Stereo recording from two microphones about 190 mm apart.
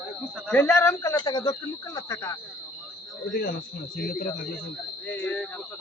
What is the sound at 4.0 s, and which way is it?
Speech, 50° left (ahead or behind).